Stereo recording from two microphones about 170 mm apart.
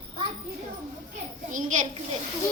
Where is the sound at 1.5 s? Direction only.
50° right (ahead or behind).